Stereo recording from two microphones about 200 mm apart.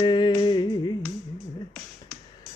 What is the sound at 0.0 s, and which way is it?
Music, 20° left (ahead or behind).